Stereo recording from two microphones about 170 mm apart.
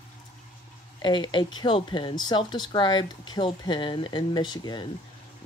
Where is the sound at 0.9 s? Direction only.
25° left (ahead or behind).